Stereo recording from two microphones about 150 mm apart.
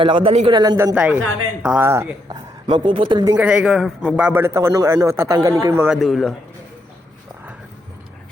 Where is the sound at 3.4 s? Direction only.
5° right (ahead or behind).